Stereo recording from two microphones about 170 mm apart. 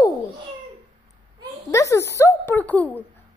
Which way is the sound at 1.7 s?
20° left (ahead or behind).